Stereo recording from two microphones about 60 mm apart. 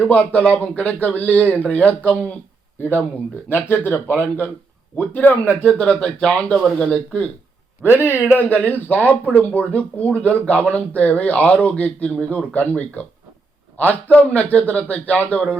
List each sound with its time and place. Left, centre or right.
0.1 s speech: left
3.5 s speech: left
5.7 s speech: centre
7.8 s a man's voice: right
8.4 s speech: left